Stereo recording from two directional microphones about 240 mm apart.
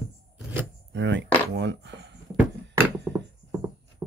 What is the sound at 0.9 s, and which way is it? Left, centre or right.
Speech, right.